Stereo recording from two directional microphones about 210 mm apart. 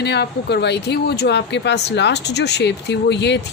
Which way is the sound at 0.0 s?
50° left (ahead or behind).